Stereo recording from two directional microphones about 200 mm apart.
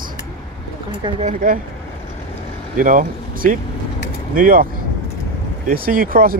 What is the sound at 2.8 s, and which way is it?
Speech, 45° right (ahead or behind).